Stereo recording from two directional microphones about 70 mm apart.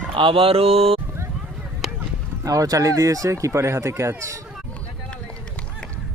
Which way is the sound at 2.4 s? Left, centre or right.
Right.